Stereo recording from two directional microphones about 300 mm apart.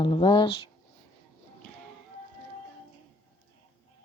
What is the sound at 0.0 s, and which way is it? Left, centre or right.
Speech, centre.